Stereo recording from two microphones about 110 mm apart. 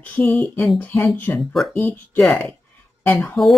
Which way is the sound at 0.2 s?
Centre (ahead or behind).